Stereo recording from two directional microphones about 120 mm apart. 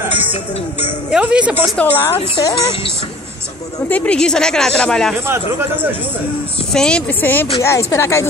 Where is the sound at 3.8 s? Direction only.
10° left (ahead or behind).